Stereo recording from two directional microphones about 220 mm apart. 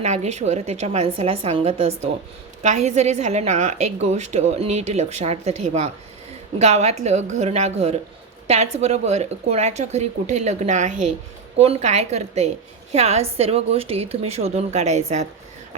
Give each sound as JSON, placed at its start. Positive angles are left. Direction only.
{"t": 0.0, "sound": "a woman's voice", "side_deg": -30}